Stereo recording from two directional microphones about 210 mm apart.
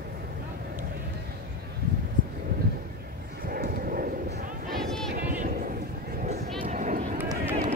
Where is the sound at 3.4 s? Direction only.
45° right (ahead or behind).